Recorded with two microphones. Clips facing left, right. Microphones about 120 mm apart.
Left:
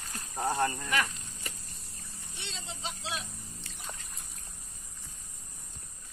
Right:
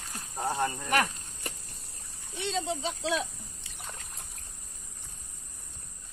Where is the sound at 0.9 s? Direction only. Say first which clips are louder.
Right 4 dB; 60° right (ahead or behind).